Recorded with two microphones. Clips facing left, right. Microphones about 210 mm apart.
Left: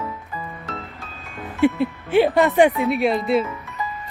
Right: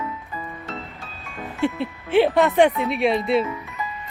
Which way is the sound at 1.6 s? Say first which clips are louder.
Left 6 dB; centre (ahead or behind).